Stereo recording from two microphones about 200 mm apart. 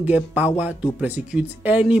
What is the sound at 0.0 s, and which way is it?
Speech, 10° right (ahead or behind).